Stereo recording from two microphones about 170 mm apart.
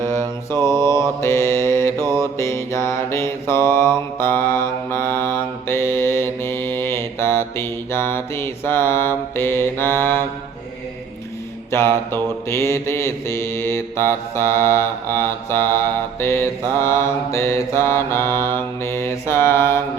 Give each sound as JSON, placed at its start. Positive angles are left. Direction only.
{"t": 0.0, "sound": "mantra", "side_deg": 15}
{"t": 11.7, "sound": "mantra", "side_deg": 15}